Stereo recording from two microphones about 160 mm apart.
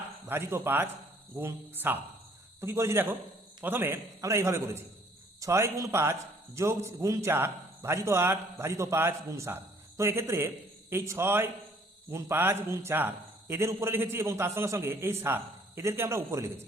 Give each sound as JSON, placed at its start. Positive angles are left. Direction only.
{"t": 0.3, "sound": "a man's voice", "side_deg": -15}